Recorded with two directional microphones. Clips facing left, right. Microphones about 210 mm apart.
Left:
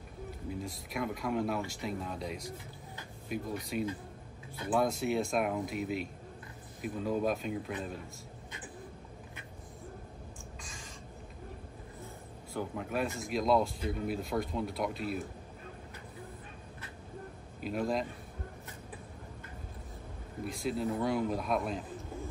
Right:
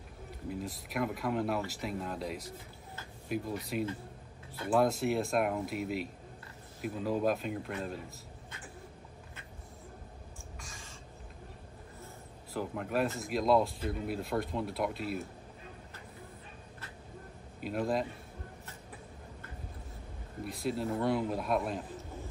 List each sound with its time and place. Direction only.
0.5 s speech: centre (ahead or behind)
10.6 s a sound: 15° left (ahead or behind)
12.5 s speech: centre (ahead or behind)
17.6 s speech: centre (ahead or behind)
20.4 s speech: centre (ahead or behind)